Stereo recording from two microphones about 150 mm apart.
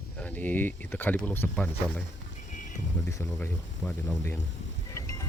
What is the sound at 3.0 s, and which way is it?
Speech, 20° left (ahead or behind).